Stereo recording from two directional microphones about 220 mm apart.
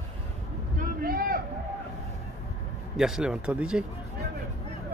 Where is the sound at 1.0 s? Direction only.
40° right (ahead or behind).